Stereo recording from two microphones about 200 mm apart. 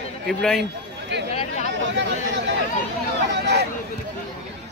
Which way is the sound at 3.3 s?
55° right (ahead or behind).